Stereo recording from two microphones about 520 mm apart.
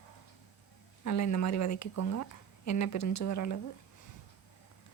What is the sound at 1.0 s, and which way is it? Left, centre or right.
Speech, left.